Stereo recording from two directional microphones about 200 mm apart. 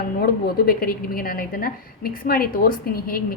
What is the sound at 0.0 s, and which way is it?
A woman's voice, 50° left (ahead or behind).